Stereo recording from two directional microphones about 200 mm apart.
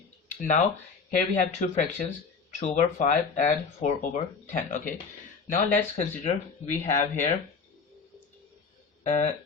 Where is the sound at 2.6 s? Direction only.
35° left (ahead or behind).